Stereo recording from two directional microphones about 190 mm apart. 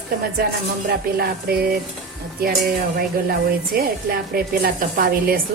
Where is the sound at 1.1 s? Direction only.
55° right (ahead or behind).